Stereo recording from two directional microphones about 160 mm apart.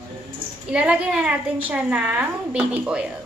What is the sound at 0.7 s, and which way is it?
A woman's voice, 5° right (ahead or behind).